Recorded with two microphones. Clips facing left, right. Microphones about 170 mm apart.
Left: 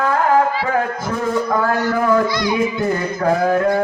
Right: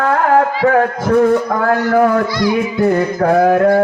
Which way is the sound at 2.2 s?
20° left (ahead or behind).